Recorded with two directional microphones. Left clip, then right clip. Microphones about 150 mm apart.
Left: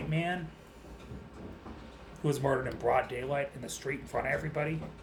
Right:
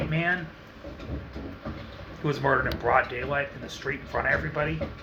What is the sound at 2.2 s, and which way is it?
Speech, 30° left (ahead or behind).